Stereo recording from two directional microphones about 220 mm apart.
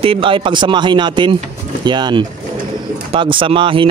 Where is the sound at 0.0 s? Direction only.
25° right (ahead or behind).